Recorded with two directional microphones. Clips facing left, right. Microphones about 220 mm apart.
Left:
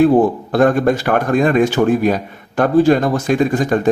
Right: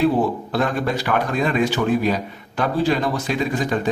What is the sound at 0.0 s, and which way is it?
A man's voice, 50° left (ahead or behind).